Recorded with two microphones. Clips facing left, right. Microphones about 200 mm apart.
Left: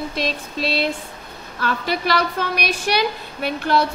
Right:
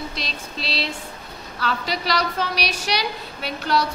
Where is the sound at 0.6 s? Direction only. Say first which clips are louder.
Left 6 dB; 50° left (ahead or behind).